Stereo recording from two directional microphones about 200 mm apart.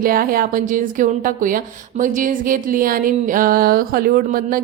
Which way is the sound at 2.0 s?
40° right (ahead or behind).